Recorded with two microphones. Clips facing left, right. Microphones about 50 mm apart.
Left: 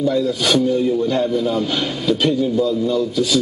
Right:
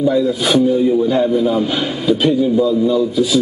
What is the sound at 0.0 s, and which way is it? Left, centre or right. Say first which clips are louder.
A man's voice: right 3 dB; centre.